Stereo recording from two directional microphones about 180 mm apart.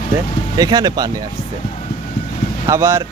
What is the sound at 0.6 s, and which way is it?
Speech, 20° right (ahead or behind).